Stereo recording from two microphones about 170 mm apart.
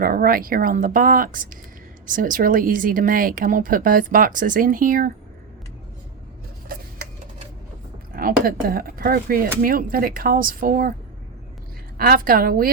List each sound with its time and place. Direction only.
0.0 s speech: 60° right (ahead or behind)
6.7 s a sound: 55° right (ahead or behind)
8.1 s speech: 60° right (ahead or behind)
11.9 s speech: 60° right (ahead or behind)